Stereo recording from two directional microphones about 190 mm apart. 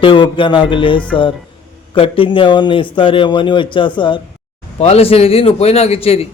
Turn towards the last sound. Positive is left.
turn(degrees=30)  # may be behind; listen again after turning